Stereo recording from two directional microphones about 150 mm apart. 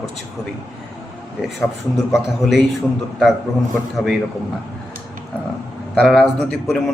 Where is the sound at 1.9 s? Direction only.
Centre (ahead or behind).